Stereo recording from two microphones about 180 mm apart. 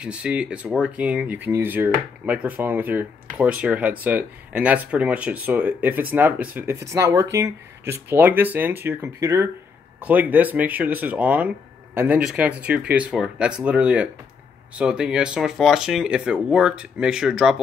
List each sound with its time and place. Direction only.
0.0 s speech: 5° right (ahead or behind)